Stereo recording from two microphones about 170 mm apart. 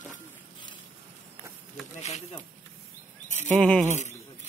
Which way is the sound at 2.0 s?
40° left (ahead or behind).